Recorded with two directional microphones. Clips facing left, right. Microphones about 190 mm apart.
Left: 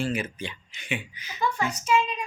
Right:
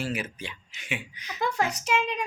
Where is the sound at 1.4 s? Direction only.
70° right (ahead or behind).